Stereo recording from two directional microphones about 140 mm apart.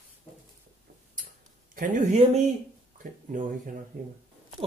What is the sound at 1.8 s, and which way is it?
Speech, 65° right (ahead or behind).